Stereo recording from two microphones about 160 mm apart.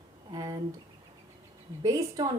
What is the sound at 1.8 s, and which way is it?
Speech, 20° right (ahead or behind).